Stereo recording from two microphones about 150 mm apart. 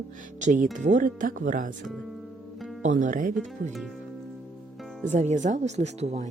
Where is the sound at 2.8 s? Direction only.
55° right (ahead or behind).